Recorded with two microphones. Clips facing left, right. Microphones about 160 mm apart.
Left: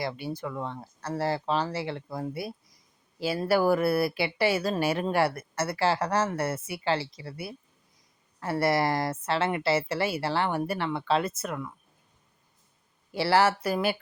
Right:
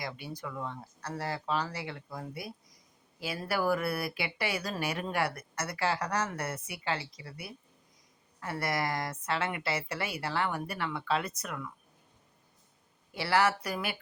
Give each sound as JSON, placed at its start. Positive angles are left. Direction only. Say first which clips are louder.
{"t": 0.0, "sound": "a woman's voice", "louder": "left 7 dB", "side_deg": 30}
{"t": 13.1, "sound": "speech", "louder": "left 5 dB", "side_deg": 30}